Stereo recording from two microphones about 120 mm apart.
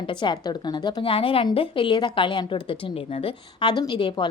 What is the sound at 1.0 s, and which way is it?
A woman's voice, 50° left (ahead or behind).